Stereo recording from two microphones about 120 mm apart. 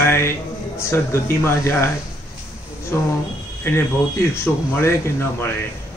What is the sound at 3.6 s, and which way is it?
Speech, 20° left (ahead or behind).